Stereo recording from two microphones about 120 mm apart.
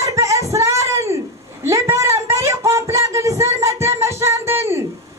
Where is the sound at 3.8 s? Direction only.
20° right (ahead or behind).